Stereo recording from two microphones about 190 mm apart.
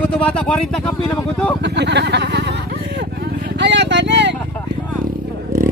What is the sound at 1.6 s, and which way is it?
Speech, 65° right (ahead or behind).